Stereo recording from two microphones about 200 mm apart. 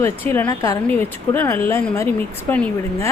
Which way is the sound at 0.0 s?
10° left (ahead or behind).